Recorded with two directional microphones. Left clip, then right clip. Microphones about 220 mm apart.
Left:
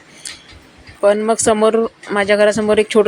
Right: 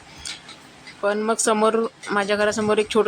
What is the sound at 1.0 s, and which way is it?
Speech, 15° left (ahead or behind).